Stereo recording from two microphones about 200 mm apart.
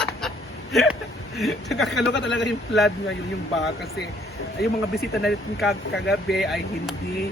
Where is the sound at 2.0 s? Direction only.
60° left (ahead or behind).